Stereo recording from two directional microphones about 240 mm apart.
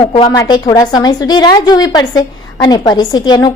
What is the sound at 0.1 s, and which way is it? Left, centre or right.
A woman's voice, centre.